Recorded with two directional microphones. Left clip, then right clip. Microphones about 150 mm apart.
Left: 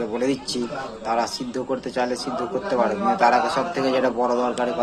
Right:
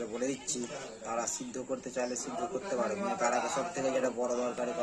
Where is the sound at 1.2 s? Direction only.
20° right (ahead or behind).